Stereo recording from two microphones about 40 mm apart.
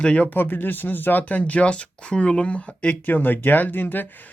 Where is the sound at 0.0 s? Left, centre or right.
Left.